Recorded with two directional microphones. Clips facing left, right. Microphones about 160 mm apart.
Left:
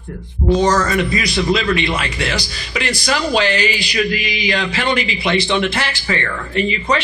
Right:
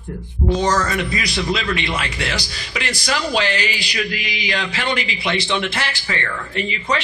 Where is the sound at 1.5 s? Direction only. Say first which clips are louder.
Left 6 dB; 55° left (ahead or behind).